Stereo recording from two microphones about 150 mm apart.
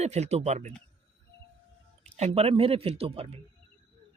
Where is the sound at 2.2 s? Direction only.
45° right (ahead or behind).